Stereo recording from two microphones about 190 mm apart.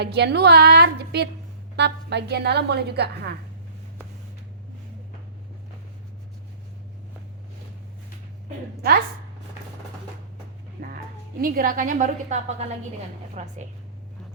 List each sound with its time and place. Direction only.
0.0 s a woman's voice: 60° right (ahead or behind)
10.8 s music: 50° right (ahead or behind)
11.3 s a woman's voice: 50° right (ahead or behind); by 13.5 s 35° right (ahead or behind)